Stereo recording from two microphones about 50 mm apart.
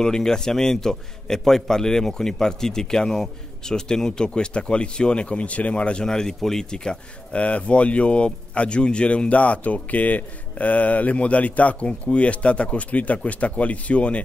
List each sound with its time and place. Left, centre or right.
0.0 s a man's voice: centre
6.0 s a man's voice: centre
7.3 s speech: left